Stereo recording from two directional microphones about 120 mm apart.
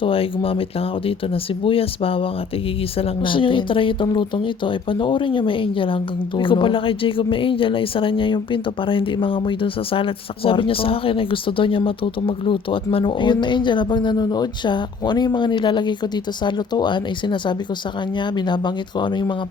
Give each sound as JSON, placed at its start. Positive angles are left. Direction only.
{"t": 0.0, "sound": "speech", "side_deg": 50}
{"t": 1.6, "sound": "speech", "side_deg": 50}